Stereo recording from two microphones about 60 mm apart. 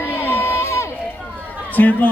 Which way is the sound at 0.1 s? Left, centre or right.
Left.